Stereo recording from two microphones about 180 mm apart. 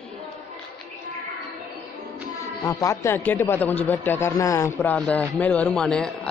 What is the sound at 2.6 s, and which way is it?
A man's voice, 20° left (ahead or behind).